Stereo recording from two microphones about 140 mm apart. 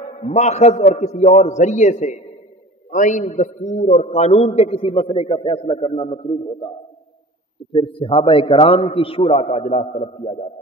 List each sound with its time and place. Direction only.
0.2 s a man's voice: 50° left (ahead or behind)
7.7 s a man's voice: 40° left (ahead or behind); by 10.5 s 55° left (ahead or behind)